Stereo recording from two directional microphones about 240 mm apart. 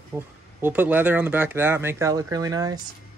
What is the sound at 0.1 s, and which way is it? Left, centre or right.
Speech, centre.